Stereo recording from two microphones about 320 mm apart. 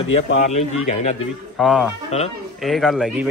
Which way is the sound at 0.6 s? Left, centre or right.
Left.